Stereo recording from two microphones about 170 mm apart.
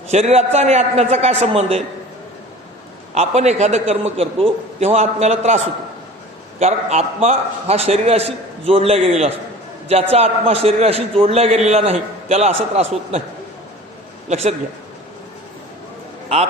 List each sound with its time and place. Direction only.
0.1 s a man's voice: 40° right (ahead or behind)
3.2 s a man's voice: 40° right (ahead or behind)
6.6 s a man's voice: 40° right (ahead or behind)
14.3 s a man's voice: 40° right (ahead or behind)